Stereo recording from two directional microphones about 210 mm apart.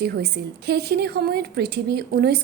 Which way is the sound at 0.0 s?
50° right (ahead or behind).